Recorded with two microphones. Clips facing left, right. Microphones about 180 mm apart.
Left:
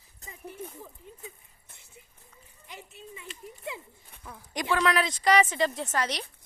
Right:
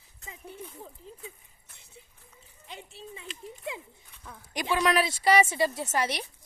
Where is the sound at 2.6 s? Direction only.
30° right (ahead or behind).